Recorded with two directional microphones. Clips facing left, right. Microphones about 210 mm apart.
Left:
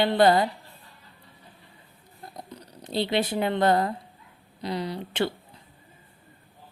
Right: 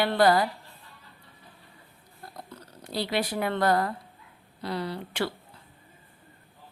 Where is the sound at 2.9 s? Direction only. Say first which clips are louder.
Left 3 dB; 25° left (ahead or behind).